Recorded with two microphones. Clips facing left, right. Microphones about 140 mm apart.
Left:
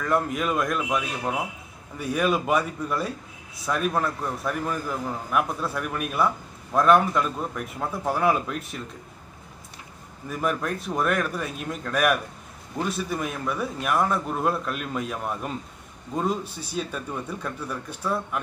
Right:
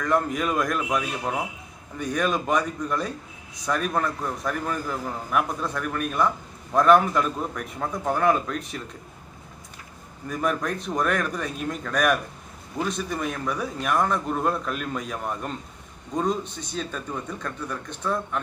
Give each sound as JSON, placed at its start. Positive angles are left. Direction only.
{"t": 0.0, "sound": "a man's voice", "side_deg": 5}
{"t": 10.2, "sound": "a man's voice", "side_deg": 5}